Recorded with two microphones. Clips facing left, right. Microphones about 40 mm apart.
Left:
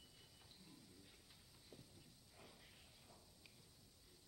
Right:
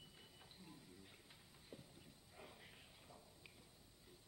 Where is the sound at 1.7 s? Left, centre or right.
Right.